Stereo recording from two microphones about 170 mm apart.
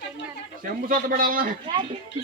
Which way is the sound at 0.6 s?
55° right (ahead or behind).